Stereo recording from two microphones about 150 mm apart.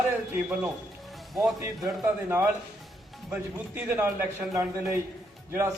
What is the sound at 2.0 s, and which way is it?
A man's voice, 15° right (ahead or behind).